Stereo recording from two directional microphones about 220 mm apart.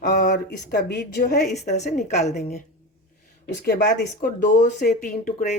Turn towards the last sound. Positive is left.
turn(degrees=35)  # may be behind; listen again after turning